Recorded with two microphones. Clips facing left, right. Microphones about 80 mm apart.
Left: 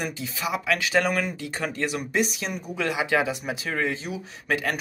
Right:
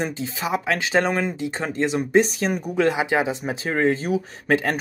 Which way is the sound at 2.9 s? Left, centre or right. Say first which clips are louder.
Right 2 dB; right.